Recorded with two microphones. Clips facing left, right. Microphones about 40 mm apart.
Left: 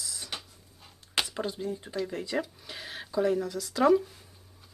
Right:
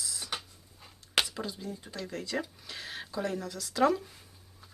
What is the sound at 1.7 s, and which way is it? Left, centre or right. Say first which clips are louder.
Speech: left 6 dB; left.